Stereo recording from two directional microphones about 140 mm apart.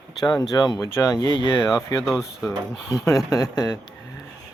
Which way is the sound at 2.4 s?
20° left (ahead or behind).